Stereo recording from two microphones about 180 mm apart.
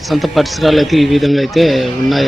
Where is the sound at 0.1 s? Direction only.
Centre (ahead or behind).